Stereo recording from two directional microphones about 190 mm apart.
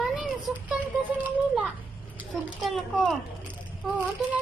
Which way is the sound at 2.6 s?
Centre (ahead or behind).